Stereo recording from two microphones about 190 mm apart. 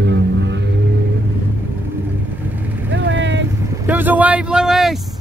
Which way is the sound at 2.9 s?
70° right (ahead or behind).